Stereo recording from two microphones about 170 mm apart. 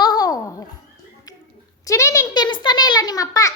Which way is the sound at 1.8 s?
20° left (ahead or behind).